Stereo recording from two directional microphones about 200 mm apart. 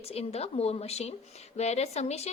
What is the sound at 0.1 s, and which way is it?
Speech, 30° left (ahead or behind).